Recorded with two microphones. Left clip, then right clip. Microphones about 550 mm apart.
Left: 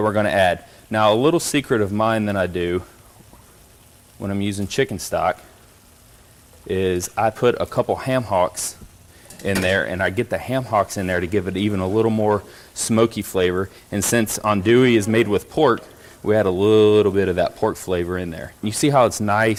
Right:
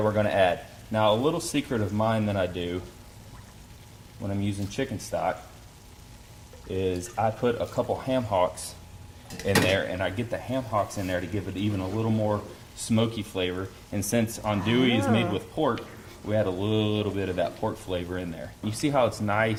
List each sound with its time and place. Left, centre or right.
0.0 s a man's voice: left
4.3 s a man's voice: left
6.7 s speech: left
9.4 s speech: left
10.0 s speech: left
12.9 s speech: left
13.9 s speech: left